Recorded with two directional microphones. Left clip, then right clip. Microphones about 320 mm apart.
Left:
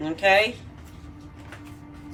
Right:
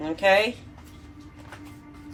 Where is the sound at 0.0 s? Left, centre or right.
Centre.